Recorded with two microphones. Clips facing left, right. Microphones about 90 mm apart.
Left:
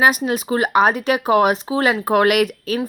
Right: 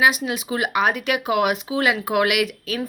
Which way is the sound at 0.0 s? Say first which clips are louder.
Left 3 dB; 40° left (ahead or behind).